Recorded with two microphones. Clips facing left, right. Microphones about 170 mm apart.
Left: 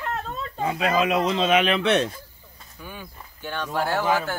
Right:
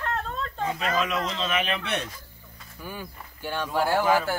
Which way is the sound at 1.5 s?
90° left.